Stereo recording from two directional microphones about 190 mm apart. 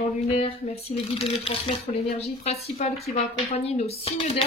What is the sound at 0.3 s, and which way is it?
A woman's voice, 30° left (ahead or behind).